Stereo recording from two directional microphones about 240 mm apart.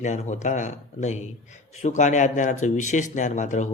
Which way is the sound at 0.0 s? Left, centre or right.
Left.